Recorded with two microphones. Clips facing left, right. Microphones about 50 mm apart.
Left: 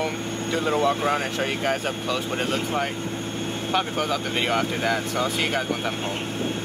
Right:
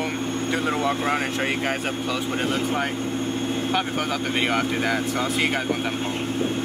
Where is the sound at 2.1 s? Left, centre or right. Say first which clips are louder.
Even; centre.